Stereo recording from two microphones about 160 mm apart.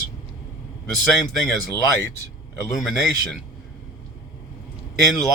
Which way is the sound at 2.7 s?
Centre (ahead or behind).